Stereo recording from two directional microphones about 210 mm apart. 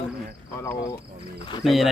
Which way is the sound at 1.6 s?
Centre (ahead or behind).